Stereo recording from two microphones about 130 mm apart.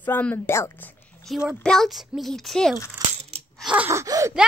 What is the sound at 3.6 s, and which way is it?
Gasp, 10° right (ahead or behind).